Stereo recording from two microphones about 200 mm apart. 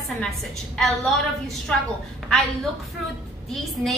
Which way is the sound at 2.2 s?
Centre (ahead or behind).